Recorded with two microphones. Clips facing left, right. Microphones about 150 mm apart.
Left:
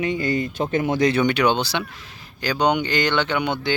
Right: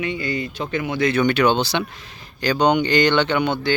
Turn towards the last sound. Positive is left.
turn(degrees=15)  # may be behind; listen again after turning